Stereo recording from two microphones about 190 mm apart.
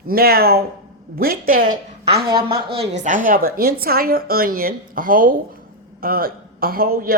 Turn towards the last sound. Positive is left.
turn(degrees=-50)  # may be behind; listen again after turning